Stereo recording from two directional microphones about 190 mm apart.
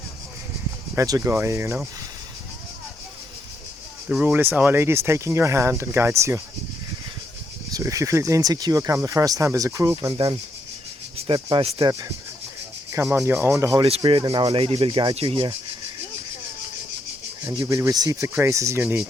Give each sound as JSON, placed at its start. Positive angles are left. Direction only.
{"t": 0.9, "sound": "speech", "side_deg": -15}
{"t": 4.1, "sound": "speech", "side_deg": -5}
{"t": 7.7, "sound": "speech", "side_deg": -20}
{"t": 11.4, "sound": "speech", "side_deg": -30}
{"t": 11.9, "sound": "speech", "side_deg": -20}
{"t": 17.4, "sound": "speech", "side_deg": -15}